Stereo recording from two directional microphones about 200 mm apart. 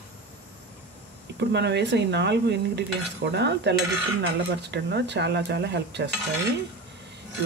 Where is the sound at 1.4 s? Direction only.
60° right (ahead or behind).